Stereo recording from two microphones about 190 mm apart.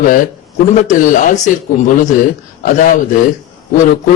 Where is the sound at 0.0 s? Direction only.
45° left (ahead or behind).